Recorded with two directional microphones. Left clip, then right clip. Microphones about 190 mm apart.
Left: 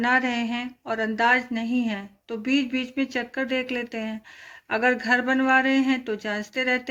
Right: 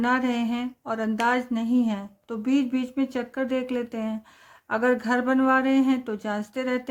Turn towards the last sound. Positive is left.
turn(degrees=-40)  # may be behind; listen again after turning